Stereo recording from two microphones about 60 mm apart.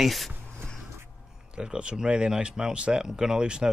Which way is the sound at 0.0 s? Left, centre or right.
Centre.